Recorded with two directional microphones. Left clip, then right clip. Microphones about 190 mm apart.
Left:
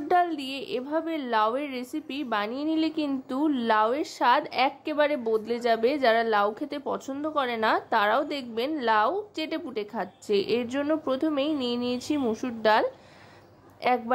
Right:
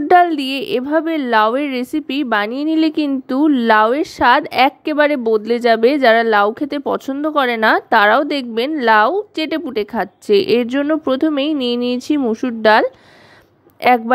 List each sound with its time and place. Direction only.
0.1 s a woman's voice: 40° right (ahead or behind)